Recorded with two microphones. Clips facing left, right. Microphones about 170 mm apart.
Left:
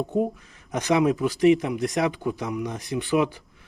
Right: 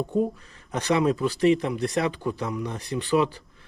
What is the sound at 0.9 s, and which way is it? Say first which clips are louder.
Speech: left 2 dB; 15° left (ahead or behind).